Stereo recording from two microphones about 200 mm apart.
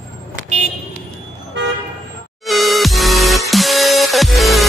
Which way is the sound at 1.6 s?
65° right (ahead or behind).